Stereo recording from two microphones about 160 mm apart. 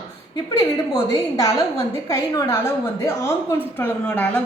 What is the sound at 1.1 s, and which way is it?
A woman's voice, 20° left (ahead or behind).